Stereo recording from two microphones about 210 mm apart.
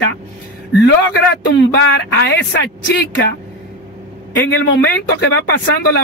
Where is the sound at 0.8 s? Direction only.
55° left (ahead or behind).